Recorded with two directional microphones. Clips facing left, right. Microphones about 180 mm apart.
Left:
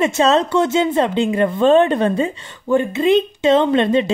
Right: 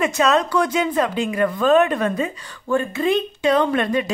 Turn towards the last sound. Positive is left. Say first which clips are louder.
# left 4 dB
turn(degrees=25)  # may be behind; listen again after turning